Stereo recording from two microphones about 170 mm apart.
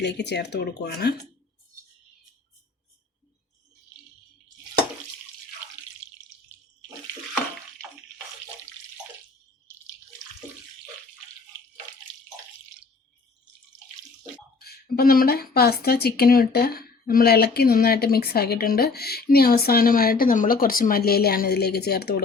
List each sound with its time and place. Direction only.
0.0 s speech: 85° left; by 1.1 s 70° left (ahead or behind)
14.6 s a woman's voice: 65° left (ahead or behind)